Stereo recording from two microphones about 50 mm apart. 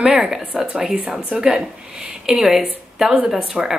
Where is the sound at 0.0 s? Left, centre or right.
Centre.